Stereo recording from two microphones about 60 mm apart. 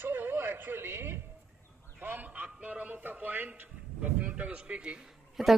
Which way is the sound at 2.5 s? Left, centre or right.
Right.